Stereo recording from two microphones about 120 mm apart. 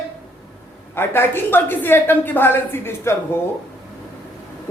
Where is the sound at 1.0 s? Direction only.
20° left (ahead or behind).